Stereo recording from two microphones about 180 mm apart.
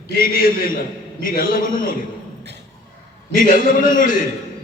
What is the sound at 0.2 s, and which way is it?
A man's voice, 55° left (ahead or behind).